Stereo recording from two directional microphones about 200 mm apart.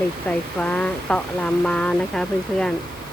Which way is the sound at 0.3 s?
5° left (ahead or behind).